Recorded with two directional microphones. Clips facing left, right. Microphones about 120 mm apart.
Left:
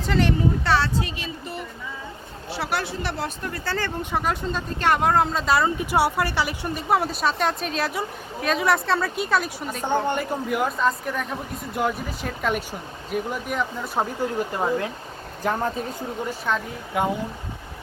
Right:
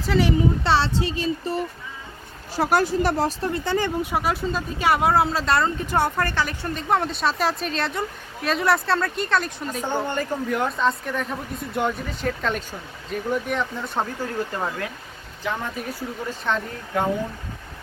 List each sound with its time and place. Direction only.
0.0 s speech: 5° right (ahead or behind)
0.6 s speech: 25° right (ahead or behind)
3.5 s speech: 20° right (ahead or behind); by 14.1 s 5° left (ahead or behind)
14.2 s speech: 15° left (ahead or behind)
16.5 s speech: 10° left (ahead or behind)